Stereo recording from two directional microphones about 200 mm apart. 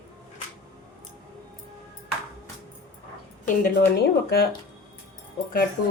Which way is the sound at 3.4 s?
45° left (ahead or behind).